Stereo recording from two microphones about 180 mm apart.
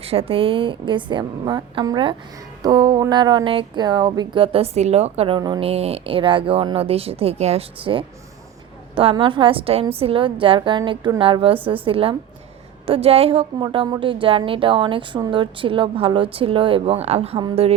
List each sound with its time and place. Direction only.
0.0 s speech: 30° right (ahead or behind)